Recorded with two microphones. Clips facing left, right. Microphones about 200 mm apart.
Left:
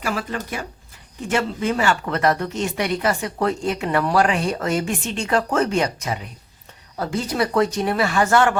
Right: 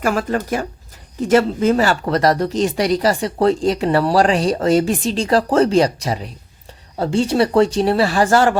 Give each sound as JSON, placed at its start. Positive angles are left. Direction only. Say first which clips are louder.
{"t": 0.0, "sound": "speech", "louder": "right 7 dB", "side_deg": -45}